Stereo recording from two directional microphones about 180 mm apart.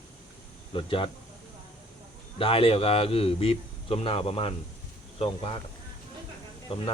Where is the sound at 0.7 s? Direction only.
30° left (ahead or behind).